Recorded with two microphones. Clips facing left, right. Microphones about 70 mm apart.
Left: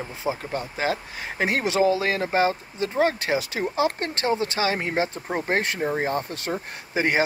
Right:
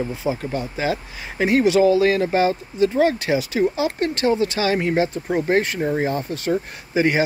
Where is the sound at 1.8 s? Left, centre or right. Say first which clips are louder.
Right 5 dB; left.